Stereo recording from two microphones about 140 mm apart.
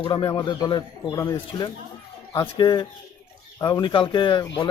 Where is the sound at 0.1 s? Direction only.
35° left (ahead or behind).